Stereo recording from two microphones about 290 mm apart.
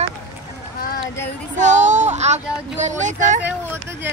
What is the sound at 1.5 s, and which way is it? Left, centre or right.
Speech, right.